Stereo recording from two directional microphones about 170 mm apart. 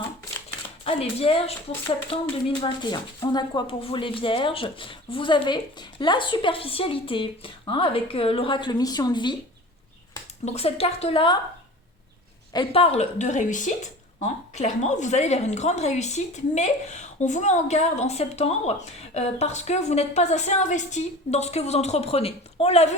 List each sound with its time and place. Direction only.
0.9 s a woman's voice: 35° left (ahead or behind)
10.4 s a woman's voice: 40° left (ahead or behind)
12.5 s a woman's voice: 35° left (ahead or behind)